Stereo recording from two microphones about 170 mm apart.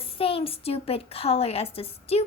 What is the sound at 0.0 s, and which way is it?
A woman's voice, 35° left (ahead or behind).